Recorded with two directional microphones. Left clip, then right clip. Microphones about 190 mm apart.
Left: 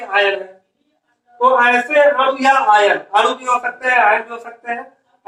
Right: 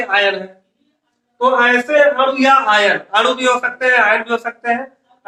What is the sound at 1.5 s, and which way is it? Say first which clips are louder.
A man's voice: right 1 dB; 20° right (ahead or behind).